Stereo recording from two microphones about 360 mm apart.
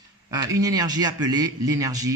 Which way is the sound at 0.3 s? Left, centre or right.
Centre.